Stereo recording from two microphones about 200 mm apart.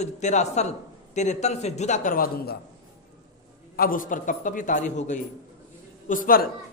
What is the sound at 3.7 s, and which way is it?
A man's voice, 45° left (ahead or behind).